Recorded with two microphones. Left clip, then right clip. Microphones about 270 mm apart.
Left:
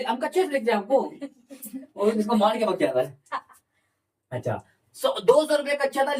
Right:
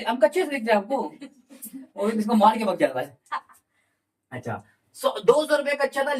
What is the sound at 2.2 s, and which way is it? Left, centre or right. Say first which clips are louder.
Speech: right 7 dB; centre.